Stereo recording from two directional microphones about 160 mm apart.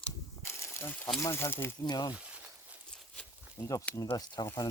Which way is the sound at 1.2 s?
15° left (ahead or behind).